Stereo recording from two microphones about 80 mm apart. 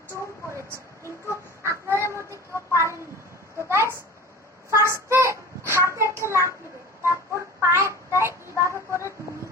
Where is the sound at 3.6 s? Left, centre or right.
Right.